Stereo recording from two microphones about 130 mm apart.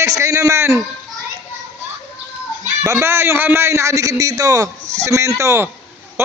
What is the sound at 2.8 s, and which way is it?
A man's voice, 20° right (ahead or behind).